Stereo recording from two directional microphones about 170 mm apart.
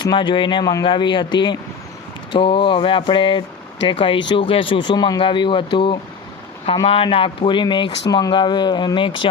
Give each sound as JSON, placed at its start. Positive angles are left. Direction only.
{"t": 0.0, "sound": "speech", "side_deg": 25}